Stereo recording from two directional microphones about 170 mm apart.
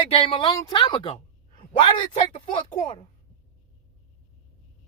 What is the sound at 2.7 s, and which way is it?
Speech, 25° left (ahead or behind).